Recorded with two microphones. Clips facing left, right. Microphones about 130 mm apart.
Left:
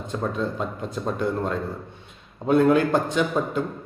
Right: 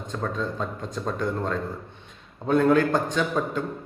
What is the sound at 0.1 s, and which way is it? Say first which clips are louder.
A man's voice: left 2 dB; 10° left (ahead or behind).